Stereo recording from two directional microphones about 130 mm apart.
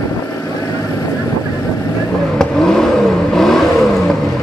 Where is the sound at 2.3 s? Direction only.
5° left (ahead or behind).